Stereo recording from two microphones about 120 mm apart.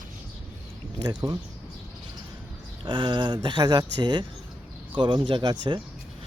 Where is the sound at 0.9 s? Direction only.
35° right (ahead or behind).